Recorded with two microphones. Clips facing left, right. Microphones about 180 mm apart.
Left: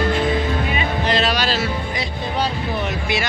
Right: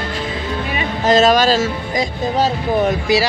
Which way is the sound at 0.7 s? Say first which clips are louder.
Right 10 dB; 45° right (ahead or behind).